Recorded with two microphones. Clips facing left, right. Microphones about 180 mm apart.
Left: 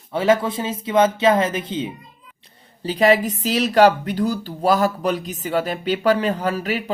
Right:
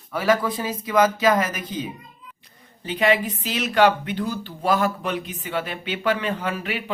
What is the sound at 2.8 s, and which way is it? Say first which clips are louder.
Speech: left 4 dB; 35° left (ahead or behind).